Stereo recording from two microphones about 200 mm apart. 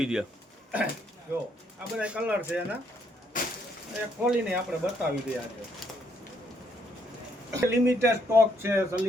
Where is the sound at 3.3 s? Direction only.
40° left (ahead or behind).